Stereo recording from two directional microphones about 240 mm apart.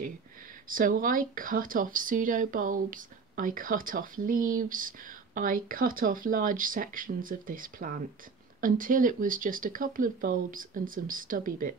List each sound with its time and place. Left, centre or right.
0.7 s speech: right